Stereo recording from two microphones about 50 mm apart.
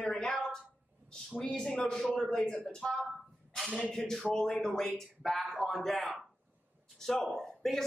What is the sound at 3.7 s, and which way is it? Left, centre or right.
A man's voice, centre.